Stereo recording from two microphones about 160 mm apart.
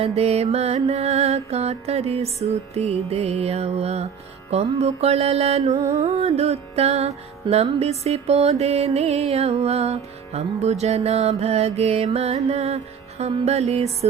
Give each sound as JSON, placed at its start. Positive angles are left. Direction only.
{"t": 0.0, "sound": "music", "side_deg": -40}